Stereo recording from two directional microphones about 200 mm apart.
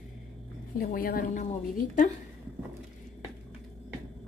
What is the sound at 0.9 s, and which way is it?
Speech, 45° left (ahead or behind).